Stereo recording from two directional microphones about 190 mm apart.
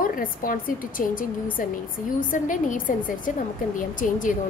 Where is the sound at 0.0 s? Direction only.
45° left (ahead or behind).